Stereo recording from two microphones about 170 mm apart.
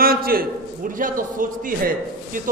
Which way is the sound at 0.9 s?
50° right (ahead or behind).